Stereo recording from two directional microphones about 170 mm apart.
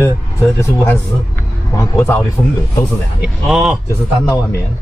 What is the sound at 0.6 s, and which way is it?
Speech, 15° left (ahead or behind).